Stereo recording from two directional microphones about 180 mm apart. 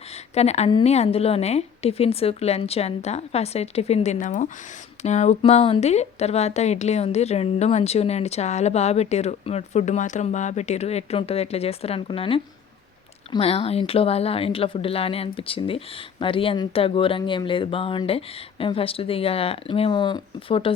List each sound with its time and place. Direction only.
0.3 s a woman's voice: 35° left (ahead or behind)